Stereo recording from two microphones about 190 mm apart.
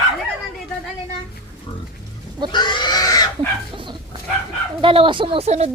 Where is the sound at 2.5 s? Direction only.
25° left (ahead or behind).